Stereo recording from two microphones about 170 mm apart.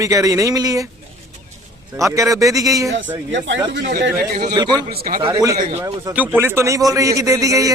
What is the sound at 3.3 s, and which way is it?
Speech, 90° right.